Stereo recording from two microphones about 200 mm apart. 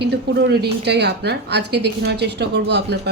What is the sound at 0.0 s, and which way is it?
A woman's voice, 60° right (ahead or behind).